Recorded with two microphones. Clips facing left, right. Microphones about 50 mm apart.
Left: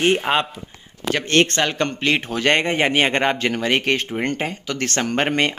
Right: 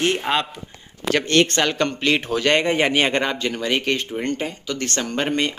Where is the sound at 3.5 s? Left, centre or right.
Left.